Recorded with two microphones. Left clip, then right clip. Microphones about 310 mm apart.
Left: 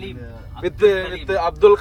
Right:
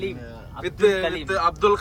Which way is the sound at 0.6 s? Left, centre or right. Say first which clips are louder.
Left 3 dB; centre.